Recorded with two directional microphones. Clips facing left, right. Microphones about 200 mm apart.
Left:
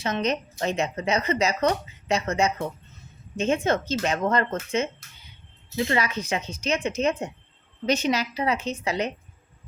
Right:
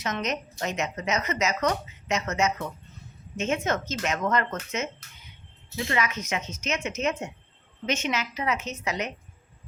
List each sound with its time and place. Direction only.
0.0 s speech: 30° left (ahead or behind)